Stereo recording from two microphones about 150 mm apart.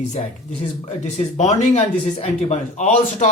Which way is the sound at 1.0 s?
50° left (ahead or behind).